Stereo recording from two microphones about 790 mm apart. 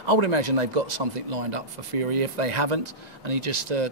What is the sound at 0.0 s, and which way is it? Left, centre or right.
Speech, right.